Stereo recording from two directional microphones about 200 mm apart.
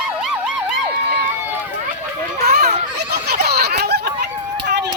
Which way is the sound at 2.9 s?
55° right (ahead or behind).